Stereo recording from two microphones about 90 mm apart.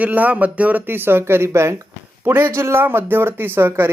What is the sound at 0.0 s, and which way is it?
Speech, 15° right (ahead or behind).